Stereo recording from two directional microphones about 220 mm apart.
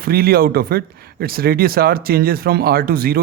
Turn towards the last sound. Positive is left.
turn(degrees=-40)  # may be behind; listen again after turning